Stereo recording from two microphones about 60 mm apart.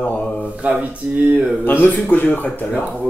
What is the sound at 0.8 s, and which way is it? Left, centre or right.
Speech, centre.